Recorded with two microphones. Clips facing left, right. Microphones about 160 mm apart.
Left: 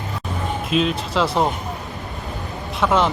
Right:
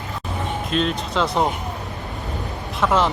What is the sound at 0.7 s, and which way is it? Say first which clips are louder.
Speech: left 3 dB; 5° left (ahead or behind).